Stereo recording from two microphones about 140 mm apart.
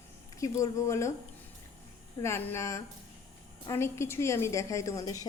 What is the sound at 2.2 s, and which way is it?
A woman's voice, 20° left (ahead or behind).